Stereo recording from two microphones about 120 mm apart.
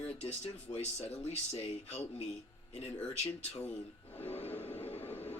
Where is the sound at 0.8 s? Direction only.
65° left (ahead or behind).